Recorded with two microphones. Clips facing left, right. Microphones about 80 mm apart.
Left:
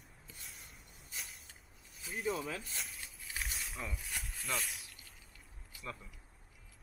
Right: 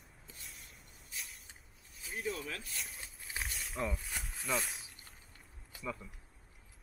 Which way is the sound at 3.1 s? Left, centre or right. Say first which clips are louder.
Right 2 dB; right.